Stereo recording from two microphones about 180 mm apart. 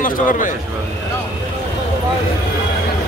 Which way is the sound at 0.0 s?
50° left (ahead or behind).